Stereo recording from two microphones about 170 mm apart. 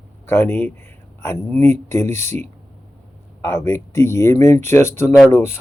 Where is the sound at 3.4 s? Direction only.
15° left (ahead or behind).